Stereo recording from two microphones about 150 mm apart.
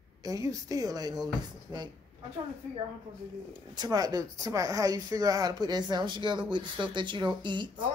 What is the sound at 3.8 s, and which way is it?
Speech, 25° right (ahead or behind).